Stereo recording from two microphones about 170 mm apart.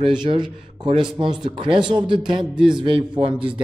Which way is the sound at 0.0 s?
30° right (ahead or behind).